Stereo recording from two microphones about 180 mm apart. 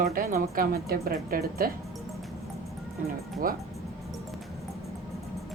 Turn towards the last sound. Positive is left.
turn(degrees=-50)  # may be behind; listen again after turning